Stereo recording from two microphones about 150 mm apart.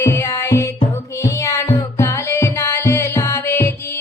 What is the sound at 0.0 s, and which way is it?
Music, 20° left (ahead or behind).